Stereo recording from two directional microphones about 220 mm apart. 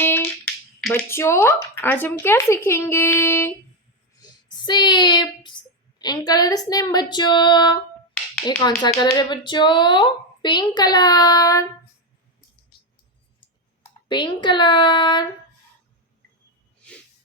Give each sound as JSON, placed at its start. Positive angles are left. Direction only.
{"t": 0.0, "sound": "finger snapping", "side_deg": 10}
{"t": 0.8, "sound": "speech", "side_deg": 0}
{"t": 1.0, "sound": "speech", "side_deg": 10}
{"t": 4.5, "sound": "child singing", "side_deg": 20}
{"t": 6.0, "sound": "a woman's voice", "side_deg": 20}
{"t": 14.1, "sound": "a woman's voice", "side_deg": 20}